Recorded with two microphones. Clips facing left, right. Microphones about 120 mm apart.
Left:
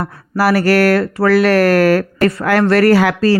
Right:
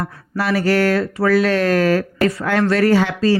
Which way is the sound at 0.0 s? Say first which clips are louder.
Left 7 dB; 70° left (ahead or behind).